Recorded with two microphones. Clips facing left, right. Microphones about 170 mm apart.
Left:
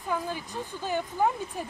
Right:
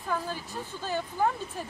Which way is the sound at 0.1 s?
15° left (ahead or behind).